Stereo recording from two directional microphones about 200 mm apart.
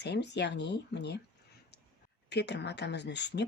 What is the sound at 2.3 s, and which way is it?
Speech, 55° left (ahead or behind).